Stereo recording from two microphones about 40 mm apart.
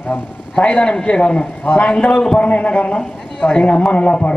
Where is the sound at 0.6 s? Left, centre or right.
Left.